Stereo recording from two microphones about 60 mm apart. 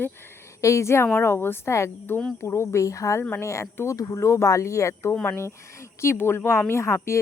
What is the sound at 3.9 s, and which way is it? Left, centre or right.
Speech, left.